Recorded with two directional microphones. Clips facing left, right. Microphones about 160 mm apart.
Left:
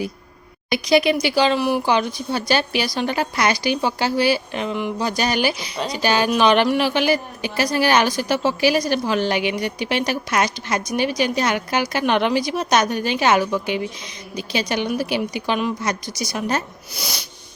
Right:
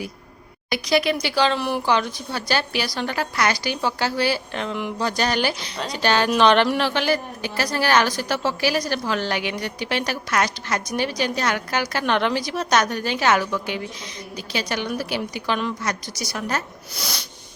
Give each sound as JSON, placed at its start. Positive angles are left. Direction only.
{"t": 0.7, "sound": "a woman's voice", "side_deg": 20}